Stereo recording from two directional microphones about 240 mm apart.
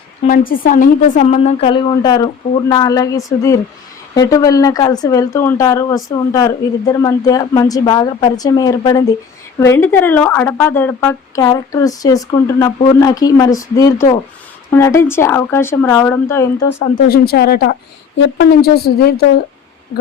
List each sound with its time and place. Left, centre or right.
0.3 s a woman's voice: left; by 17.0 s centre
17.1 s a woman's voice: left